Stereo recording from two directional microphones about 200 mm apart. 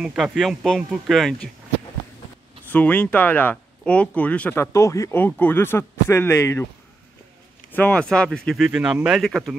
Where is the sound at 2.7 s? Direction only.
5° left (ahead or behind).